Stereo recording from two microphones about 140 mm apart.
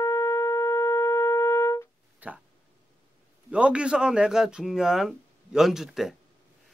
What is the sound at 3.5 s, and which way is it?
Speech, 5° right (ahead or behind).